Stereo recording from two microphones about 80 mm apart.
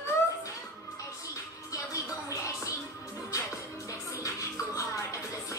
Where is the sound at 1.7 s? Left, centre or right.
Left.